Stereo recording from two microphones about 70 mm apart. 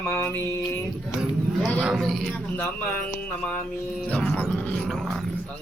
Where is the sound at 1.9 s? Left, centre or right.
Centre.